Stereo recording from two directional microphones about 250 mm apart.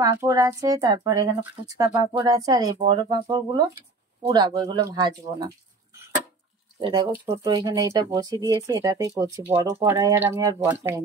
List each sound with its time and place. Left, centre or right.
0.0 s speech: centre
6.8 s speech: centre